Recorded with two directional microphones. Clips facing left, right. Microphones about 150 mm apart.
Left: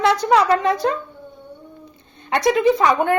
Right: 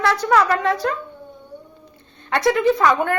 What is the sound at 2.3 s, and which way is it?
Speech, 15° left (ahead or behind).